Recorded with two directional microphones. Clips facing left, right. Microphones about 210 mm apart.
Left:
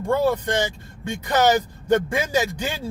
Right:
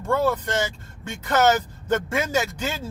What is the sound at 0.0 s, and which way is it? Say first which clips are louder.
Speech: left 2 dB; 15° left (ahead or behind).